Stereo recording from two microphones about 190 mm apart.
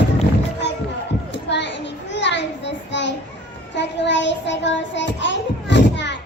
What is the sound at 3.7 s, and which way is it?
Child singing, 70° left (ahead or behind).